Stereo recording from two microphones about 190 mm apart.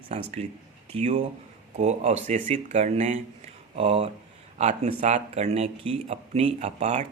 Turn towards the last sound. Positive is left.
turn(degrees=-35)  # may be behind; listen again after turning